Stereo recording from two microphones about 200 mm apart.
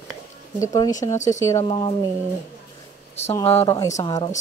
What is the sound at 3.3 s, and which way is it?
Speech, 15° left (ahead or behind).